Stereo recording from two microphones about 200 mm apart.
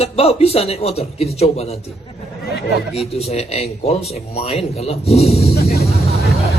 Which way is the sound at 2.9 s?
30° left (ahead or behind).